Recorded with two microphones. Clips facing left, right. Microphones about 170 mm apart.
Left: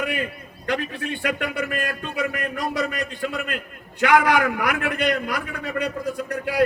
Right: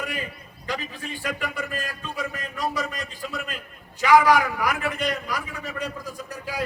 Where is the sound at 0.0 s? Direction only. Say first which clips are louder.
Left 6 dB; 65° left (ahead or behind).